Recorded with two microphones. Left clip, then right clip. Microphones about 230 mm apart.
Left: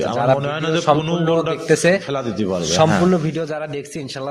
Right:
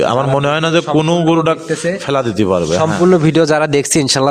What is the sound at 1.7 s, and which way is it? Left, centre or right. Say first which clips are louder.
Speech: left 3 dB; left.